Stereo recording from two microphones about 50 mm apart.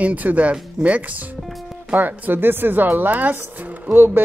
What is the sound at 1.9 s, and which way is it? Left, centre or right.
Speech, right.